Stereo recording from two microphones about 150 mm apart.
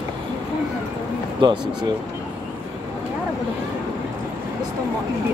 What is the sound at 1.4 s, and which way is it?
Speech, 35° right (ahead or behind).